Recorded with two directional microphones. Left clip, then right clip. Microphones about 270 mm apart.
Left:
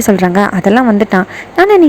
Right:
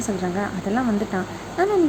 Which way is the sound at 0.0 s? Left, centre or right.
Left.